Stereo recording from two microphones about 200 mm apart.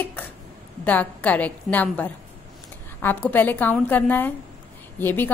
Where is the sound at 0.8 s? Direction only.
5° left (ahead or behind).